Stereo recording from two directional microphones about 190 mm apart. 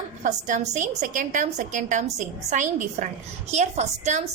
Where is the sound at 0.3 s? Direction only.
40° right (ahead or behind).